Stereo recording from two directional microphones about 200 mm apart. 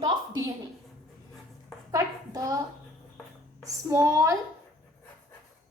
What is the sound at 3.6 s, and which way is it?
Speech, 15° right (ahead or behind).